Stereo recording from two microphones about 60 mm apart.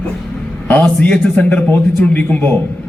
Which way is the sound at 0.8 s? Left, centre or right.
Centre.